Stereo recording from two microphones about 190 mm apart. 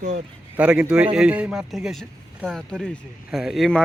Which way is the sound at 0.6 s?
5° right (ahead or behind).